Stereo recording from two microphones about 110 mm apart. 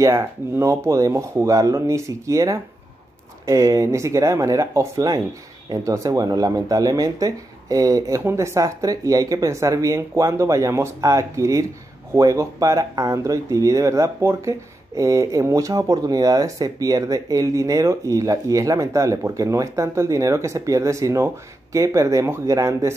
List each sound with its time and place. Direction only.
0.0 s speech: 25° right (ahead or behind)